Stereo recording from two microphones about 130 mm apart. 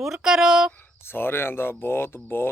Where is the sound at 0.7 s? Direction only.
15° left (ahead or behind).